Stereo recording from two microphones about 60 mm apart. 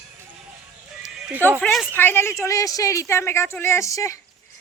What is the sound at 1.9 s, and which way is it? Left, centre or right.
A woman's voice, left.